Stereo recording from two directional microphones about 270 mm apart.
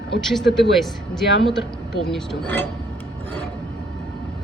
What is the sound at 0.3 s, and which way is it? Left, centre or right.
Speech, centre.